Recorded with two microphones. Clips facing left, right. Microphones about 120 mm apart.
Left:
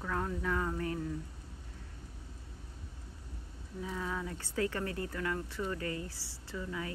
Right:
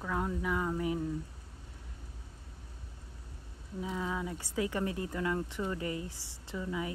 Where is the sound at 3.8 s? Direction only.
15° right (ahead or behind).